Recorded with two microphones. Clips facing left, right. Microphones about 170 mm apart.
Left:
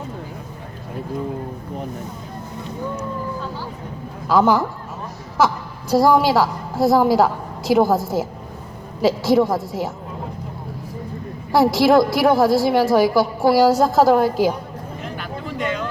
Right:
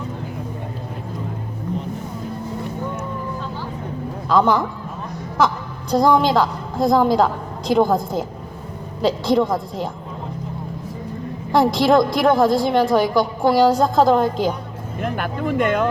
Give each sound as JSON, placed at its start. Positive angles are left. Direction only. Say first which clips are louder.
{"t": 4.3, "sound": "a woman's voice", "louder": "left 1 dB", "side_deg": 5}
{"t": 5.9, "sound": "a woman's voice", "louder": "left 1 dB", "side_deg": 5}
{"t": 11.5, "sound": "a woman's voice", "louder": "left 1 dB", "side_deg": 5}
{"t": 15.0, "sound": "a sound", "louder": "right 9 dB", "side_deg": -55}